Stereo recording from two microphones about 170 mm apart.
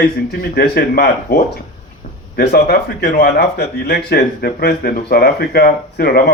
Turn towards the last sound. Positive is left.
turn(degrees=60)  # may be behind; listen again after turning